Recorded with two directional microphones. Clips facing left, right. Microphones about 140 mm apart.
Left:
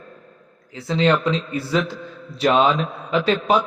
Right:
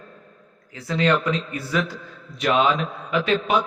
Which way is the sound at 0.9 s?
25° left (ahead or behind).